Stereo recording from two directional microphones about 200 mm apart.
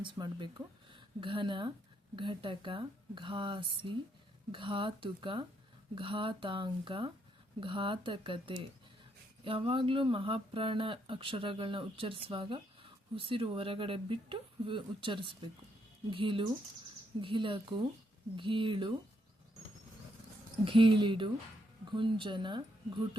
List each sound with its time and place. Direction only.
0.0 s speech: 25° right (ahead or behind)
20.7 s speech: 25° right (ahead or behind)